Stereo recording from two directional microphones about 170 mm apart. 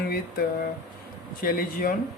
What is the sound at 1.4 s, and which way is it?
Speech, 55° left (ahead or behind).